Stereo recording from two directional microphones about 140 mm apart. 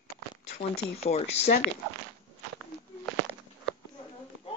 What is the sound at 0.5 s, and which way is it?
Speech, 50° left (ahead or behind).